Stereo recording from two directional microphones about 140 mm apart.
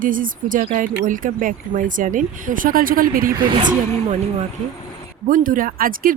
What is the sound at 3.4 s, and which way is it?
Speech, 35° right (ahead or behind).